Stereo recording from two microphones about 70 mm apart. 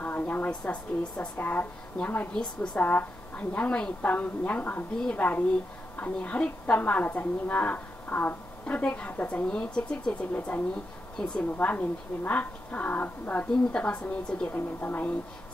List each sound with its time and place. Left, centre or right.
0.0 s a woman's voice: left
9.5 s a woman's voice: centre
14.5 s a woman's voice: left